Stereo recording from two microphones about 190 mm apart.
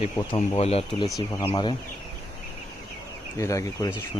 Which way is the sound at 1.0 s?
20° left (ahead or behind).